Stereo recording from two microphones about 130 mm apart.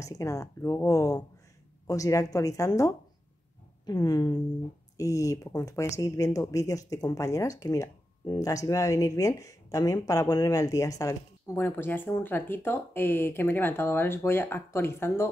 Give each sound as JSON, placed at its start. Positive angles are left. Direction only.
{"t": 0.0, "sound": "speech", "side_deg": 25}